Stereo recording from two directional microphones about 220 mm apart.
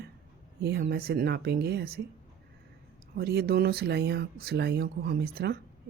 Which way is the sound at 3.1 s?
45° right (ahead or behind).